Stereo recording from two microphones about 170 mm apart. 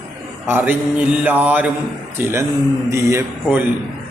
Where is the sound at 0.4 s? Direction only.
10° right (ahead or behind).